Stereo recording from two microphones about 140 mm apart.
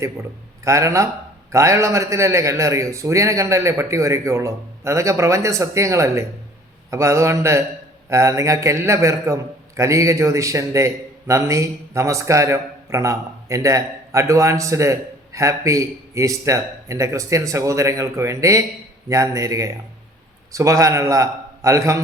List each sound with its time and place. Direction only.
0.6 s a man's voice: 20° right (ahead or behind)